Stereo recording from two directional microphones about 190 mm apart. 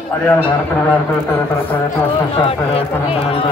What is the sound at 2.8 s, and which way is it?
Speech, 30° left (ahead or behind).